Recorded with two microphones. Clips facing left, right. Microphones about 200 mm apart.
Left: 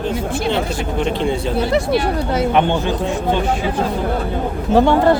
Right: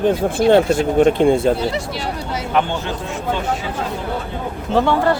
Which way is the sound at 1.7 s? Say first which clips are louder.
Left 7 dB; 55° left (ahead or behind).